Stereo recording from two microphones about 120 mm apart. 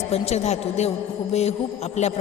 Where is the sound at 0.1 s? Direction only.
65° left (ahead or behind).